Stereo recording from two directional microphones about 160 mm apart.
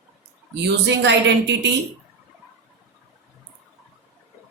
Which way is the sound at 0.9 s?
90° right.